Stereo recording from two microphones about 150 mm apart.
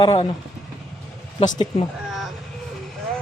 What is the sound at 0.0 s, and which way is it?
Speech, 35° left (ahead or behind).